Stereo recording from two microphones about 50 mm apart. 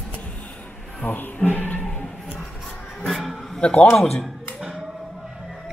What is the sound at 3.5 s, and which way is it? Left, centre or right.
Speech, left.